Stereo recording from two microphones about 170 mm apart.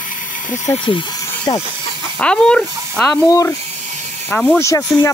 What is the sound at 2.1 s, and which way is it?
Speech, 5° left (ahead or behind).